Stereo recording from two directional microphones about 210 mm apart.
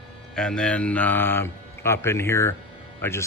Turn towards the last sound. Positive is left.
turn(degrees=10)  # may be behind; listen again after turning